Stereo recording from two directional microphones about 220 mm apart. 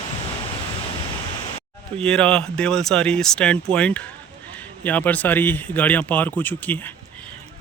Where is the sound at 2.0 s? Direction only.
5° left (ahead or behind).